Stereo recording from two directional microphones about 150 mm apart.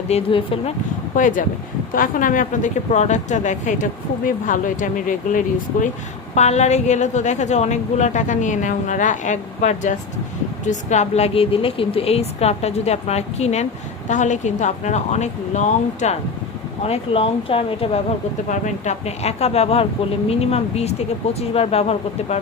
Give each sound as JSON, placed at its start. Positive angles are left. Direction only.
{"t": 0.1, "sound": "speech", "side_deg": 35}
{"t": 1.1, "sound": "a woman's voice", "side_deg": 60}
{"t": 6.3, "sound": "speech", "side_deg": 50}
{"t": 16.8, "sound": "speech", "side_deg": 40}
{"t": 18.4, "sound": "speech", "side_deg": 55}